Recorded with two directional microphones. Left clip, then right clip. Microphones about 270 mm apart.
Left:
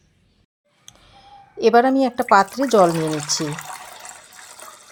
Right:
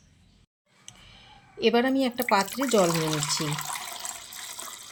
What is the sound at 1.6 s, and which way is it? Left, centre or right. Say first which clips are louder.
Speech: left 8 dB; centre.